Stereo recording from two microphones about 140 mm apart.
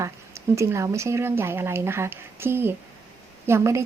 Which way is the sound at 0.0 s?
20° right (ahead or behind).